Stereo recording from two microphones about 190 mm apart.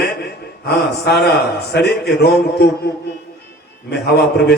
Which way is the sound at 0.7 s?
60° left (ahead or behind).